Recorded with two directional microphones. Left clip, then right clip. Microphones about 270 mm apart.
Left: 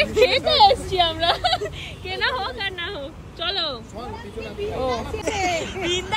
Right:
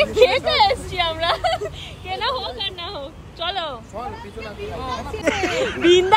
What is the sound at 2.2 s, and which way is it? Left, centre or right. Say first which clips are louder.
Speech: left 1 dB; centre.